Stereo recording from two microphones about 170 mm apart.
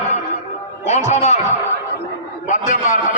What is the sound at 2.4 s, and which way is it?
Speech, 45° left (ahead or behind).